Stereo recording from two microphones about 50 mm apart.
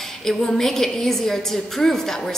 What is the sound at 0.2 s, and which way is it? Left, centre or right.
A woman's voice, centre.